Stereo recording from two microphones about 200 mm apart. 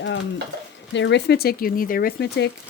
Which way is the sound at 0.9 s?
60° left (ahead or behind).